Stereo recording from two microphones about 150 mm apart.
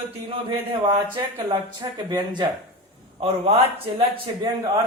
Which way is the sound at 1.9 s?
30° right (ahead or behind).